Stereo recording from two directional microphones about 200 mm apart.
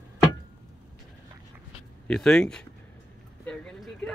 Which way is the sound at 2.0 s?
5° left (ahead or behind).